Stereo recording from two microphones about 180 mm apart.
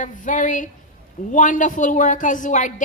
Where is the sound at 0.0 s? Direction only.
45° left (ahead or behind).